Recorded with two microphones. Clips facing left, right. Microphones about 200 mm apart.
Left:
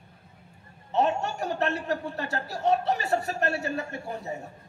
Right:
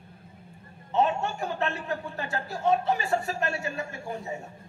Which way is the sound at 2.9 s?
65° left (ahead or behind).